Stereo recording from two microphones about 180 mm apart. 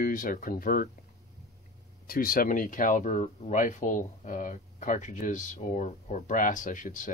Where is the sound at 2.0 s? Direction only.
55° left (ahead or behind).